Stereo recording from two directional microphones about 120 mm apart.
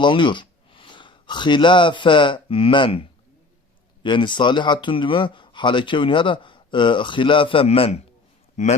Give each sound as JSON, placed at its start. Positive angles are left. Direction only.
{"t": 0.0, "sound": "speech", "side_deg": 40}